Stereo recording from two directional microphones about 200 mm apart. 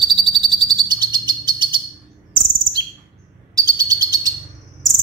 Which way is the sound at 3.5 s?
20° right (ahead or behind).